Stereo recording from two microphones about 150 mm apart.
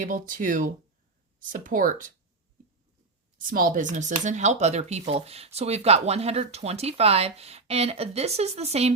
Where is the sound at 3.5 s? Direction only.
65° right (ahead or behind).